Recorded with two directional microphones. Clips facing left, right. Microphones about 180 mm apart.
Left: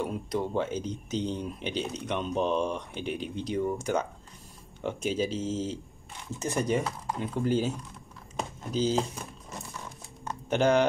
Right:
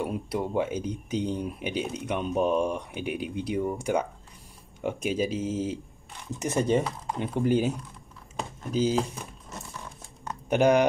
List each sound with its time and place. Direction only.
0.0 s speech: 10° right (ahead or behind)
6.4 s speech: 25° right (ahead or behind)
8.7 s speech: 10° right (ahead or behind)
10.5 s speech: 15° right (ahead or behind)